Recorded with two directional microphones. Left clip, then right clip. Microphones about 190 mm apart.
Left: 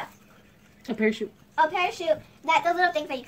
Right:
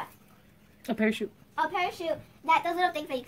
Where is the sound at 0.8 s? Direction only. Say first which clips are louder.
Left 3 dB; 35° right (ahead or behind).